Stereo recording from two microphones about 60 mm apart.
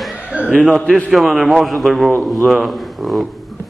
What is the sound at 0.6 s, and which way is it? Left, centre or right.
Speech, centre.